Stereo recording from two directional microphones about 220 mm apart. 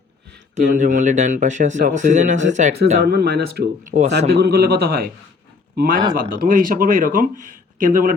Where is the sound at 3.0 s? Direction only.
45° right (ahead or behind).